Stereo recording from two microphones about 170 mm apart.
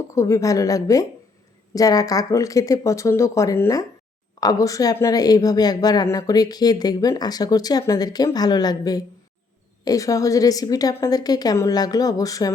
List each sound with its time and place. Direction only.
0.1 s speech: 20° left (ahead or behind)